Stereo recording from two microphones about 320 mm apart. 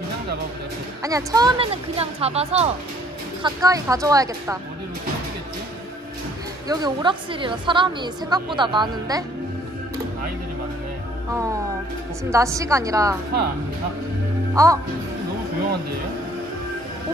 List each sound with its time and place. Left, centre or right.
1.0 s a woman's voice: centre
6.7 s a woman's voice: centre
12.3 s a woman's voice: centre
14.5 s speech: centre